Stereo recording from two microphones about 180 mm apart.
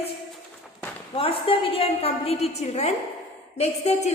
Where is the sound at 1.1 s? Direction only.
30° left (ahead or behind).